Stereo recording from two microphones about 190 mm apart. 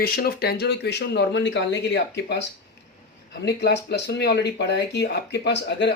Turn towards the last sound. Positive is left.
turn(degrees=65)  # may be behind; listen again after turning